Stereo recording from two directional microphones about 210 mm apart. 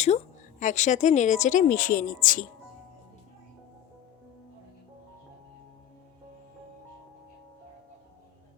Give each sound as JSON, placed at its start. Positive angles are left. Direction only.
{"t": 0.6, "sound": "speech", "side_deg": 35}